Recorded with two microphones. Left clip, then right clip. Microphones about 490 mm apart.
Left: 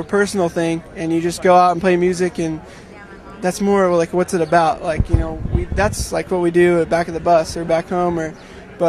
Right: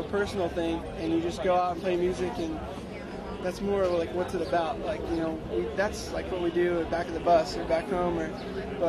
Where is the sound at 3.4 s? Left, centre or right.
Left.